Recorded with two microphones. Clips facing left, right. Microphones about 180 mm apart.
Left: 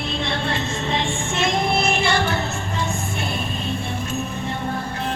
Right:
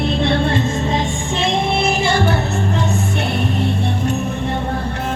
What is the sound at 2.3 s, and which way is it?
Music, 65° right (ahead or behind).